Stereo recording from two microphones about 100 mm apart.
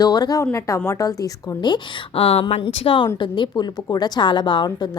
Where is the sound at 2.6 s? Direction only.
55° left (ahead or behind).